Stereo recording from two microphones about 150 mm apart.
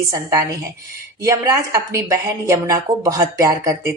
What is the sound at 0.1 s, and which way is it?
Speech, 20° right (ahead or behind).